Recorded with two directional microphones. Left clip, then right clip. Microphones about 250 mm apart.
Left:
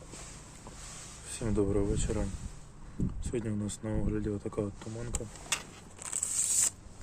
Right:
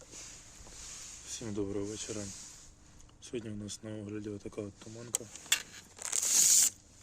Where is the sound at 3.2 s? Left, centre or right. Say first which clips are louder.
Left 3 dB; centre.